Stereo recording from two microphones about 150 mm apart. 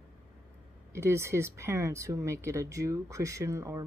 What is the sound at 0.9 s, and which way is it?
Speech, 15° right (ahead or behind).